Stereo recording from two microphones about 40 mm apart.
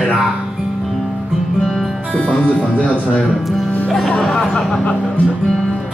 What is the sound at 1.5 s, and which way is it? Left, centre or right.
Music, centre.